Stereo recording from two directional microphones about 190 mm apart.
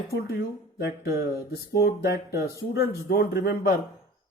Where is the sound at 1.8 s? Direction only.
55° left (ahead or behind).